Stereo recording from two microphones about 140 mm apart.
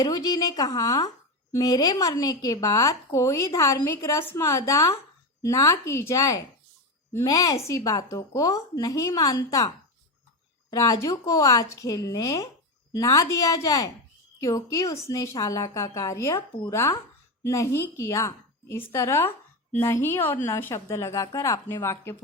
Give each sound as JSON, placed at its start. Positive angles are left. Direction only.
{"t": 0.0, "sound": "a woman's voice", "side_deg": 25}